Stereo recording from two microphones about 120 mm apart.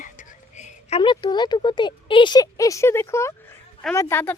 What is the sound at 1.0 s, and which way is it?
Speech, 40° left (ahead or behind).